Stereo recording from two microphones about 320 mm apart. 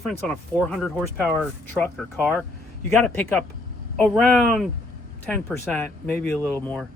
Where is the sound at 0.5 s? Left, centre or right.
Centre.